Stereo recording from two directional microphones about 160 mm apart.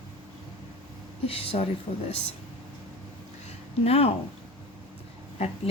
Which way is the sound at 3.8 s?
40° left (ahead or behind).